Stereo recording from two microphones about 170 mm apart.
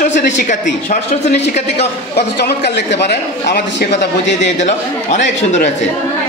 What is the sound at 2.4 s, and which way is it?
A man's voice, 80° left.